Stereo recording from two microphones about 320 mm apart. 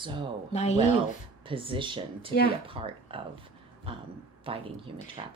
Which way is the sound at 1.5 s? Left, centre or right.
Centre.